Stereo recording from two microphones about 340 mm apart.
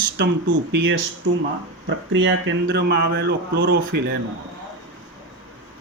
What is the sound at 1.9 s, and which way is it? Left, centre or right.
Speech, right.